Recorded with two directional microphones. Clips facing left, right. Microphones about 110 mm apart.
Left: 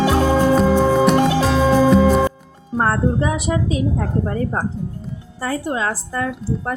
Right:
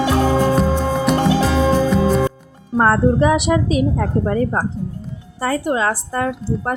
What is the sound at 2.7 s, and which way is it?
A woman's voice, 90° right.